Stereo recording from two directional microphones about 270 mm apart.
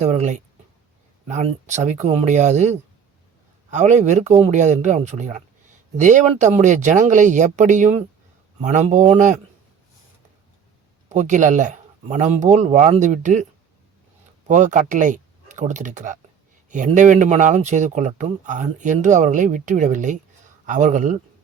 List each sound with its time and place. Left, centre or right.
0.0 s speech: right
11.1 s speech: right